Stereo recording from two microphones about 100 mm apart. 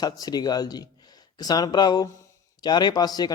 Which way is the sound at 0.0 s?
40° left (ahead or behind).